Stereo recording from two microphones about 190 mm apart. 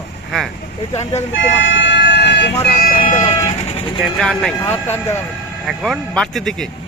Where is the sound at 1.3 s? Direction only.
75° left (ahead or behind).